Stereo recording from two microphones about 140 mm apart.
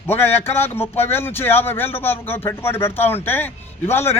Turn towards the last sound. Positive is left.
turn(degrees=15)  # may be behind; listen again after turning